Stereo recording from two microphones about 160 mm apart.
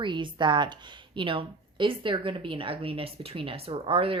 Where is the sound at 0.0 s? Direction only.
30° right (ahead or behind).